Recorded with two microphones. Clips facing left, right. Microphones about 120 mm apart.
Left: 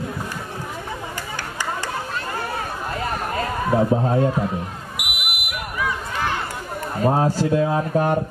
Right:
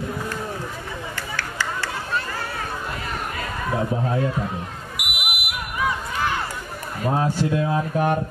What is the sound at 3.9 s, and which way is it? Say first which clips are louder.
Speech: left 5 dB; 30° left (ahead or behind).